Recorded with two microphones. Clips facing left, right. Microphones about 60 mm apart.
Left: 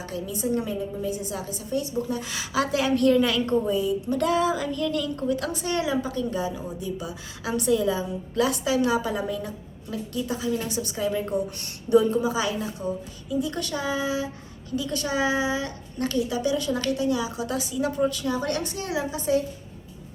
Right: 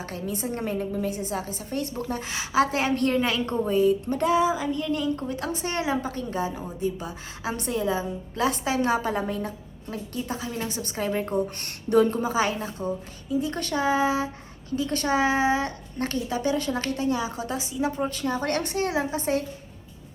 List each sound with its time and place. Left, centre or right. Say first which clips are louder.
0.0 s a woman's voice: left 1 dB; right
1.2 s a woman's voice: right 2 dB; right
3.8 s a woman's voice: right 3 dB; right
4.2 s a woman's voice: even; right